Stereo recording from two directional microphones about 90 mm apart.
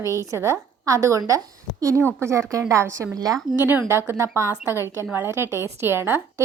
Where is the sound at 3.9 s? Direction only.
30° right (ahead or behind).